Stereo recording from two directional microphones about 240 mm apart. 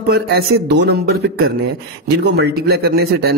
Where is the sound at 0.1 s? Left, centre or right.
Right.